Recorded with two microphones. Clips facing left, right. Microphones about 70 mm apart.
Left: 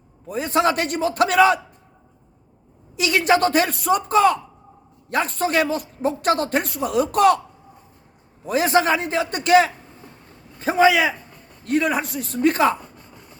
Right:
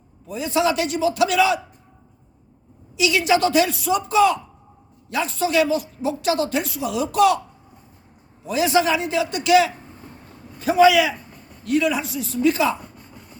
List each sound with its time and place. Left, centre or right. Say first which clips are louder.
0.3 s a man's voice: left 1 dB; left
2.9 s a man's voice: even; left
8.4 s a man's voice: left 1 dB; left